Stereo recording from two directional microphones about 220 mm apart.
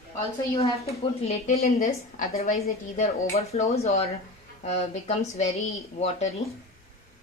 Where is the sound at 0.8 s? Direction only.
30° left (ahead or behind).